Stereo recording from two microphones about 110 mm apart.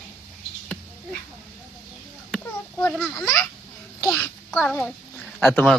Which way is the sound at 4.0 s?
25° left (ahead or behind).